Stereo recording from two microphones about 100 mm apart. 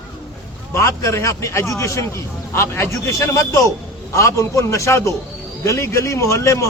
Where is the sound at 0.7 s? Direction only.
30° left (ahead or behind).